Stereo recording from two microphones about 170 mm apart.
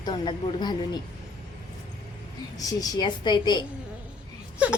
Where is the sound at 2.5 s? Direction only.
20° left (ahead or behind).